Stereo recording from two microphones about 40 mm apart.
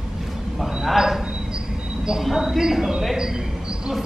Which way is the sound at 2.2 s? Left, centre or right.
Centre.